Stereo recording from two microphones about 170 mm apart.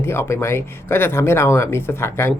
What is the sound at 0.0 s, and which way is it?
Speech, 15° left (ahead or behind).